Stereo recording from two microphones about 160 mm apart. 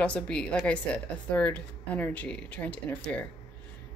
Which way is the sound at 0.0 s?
5° left (ahead or behind).